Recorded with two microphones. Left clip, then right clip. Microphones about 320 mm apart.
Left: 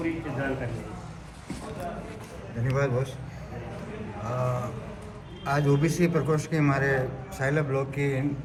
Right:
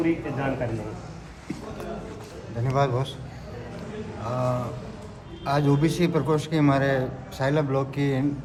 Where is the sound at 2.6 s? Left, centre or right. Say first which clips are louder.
Right 3 dB; centre.